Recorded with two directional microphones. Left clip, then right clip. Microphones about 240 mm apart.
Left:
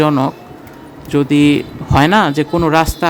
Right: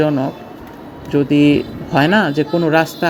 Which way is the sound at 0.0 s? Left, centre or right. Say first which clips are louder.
Left 3 dB; left.